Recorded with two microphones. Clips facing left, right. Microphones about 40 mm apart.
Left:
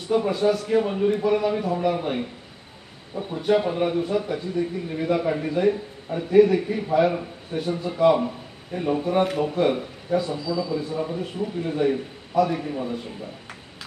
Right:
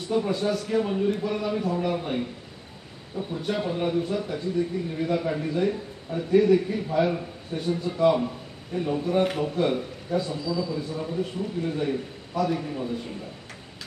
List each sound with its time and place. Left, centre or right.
0.0 s speech: centre
0.7 s speech: centre